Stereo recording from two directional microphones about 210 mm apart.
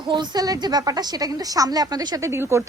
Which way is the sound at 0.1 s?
20° right (ahead or behind).